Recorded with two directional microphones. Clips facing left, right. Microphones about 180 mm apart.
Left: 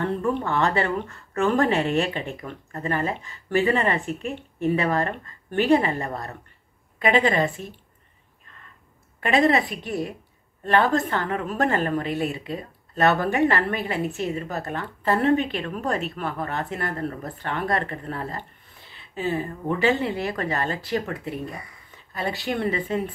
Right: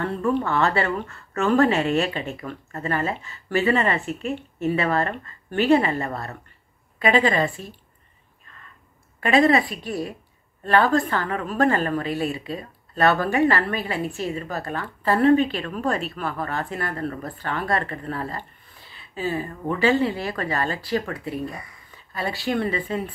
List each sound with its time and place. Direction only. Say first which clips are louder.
0.0 s speech: right 1 dB; 15° left (ahead or behind)
9.3 s speech: right 2 dB; 20° left (ahead or behind)